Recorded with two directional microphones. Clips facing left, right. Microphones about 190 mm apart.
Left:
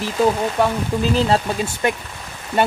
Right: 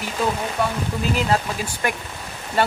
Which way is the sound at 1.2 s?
30° left (ahead or behind).